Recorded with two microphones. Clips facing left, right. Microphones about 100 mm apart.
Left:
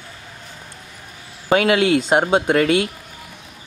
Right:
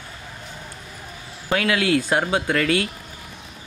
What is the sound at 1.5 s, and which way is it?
Speech, 25° left (ahead or behind).